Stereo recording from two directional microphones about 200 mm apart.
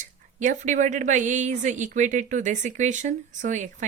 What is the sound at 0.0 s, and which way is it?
Speech, 40° right (ahead or behind).